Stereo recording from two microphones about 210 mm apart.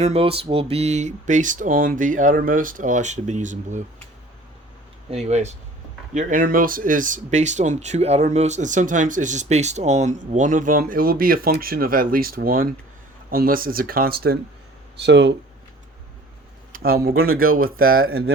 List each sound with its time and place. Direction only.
0.0 s speech: 30° right (ahead or behind)
5.1 s speech: 30° right (ahead or behind); by 15.4 s 55° right (ahead or behind)
16.7 s a sound: 45° right (ahead or behind)
17.1 s speech: 45° right (ahead or behind)
17.7 s speech: 80° right